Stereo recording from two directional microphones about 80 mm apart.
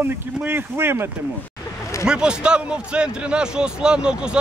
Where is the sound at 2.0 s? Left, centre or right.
Centre.